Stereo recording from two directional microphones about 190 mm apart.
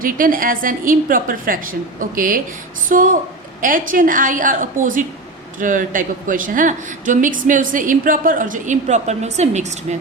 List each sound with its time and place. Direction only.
0.0 s speech: 45° right (ahead or behind)